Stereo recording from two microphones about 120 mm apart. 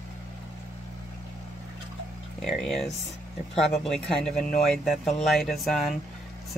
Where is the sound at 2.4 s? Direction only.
Centre (ahead or behind).